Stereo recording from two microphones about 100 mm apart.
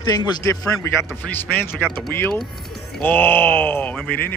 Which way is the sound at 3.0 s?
20° left (ahead or behind).